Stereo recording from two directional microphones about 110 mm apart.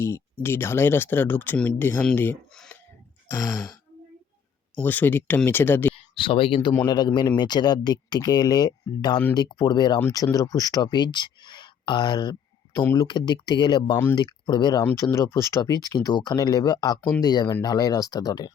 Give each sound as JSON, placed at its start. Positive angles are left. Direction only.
{"t": 0.4, "sound": "speech", "side_deg": 20}
{"t": 2.5, "sound": "a sound", "side_deg": 5}
{"t": 4.8, "sound": "speech", "side_deg": 15}
{"t": 5.9, "sound": "speech", "side_deg": 55}
{"t": 12.7, "sound": "speech", "side_deg": 20}
{"t": 13.0, "sound": "speech", "side_deg": 40}
{"t": 14.8, "sound": "speech", "side_deg": 25}
{"t": 15.4, "sound": "speech", "side_deg": 35}